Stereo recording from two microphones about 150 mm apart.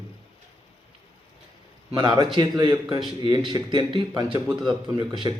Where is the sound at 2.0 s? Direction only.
30° right (ahead or behind).